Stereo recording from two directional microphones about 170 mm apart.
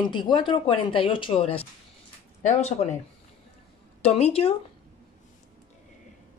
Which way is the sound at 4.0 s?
35° left (ahead or behind).